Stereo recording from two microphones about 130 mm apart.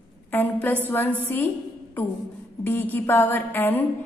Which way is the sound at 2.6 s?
15° left (ahead or behind).